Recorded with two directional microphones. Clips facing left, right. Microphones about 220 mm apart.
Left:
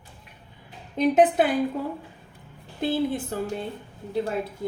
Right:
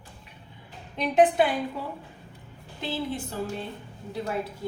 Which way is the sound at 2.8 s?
55° left (ahead or behind).